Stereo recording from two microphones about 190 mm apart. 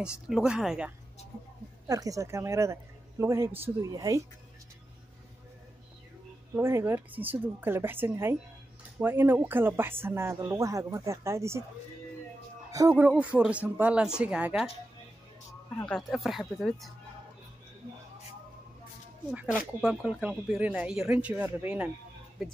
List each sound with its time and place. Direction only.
0.0 s speech: 5° right (ahead or behind)
1.9 s speech: 15° right (ahead or behind)
6.5 s speech: 10° right (ahead or behind)
12.7 s speech: 15° right (ahead or behind)
15.7 s speech: 5° left (ahead or behind)
19.3 s speech: 10° right (ahead or behind)